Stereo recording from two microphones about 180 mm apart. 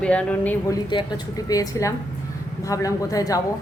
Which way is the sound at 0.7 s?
25° left (ahead or behind).